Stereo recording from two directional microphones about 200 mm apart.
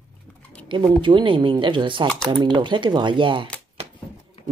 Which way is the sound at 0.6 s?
25° right (ahead or behind).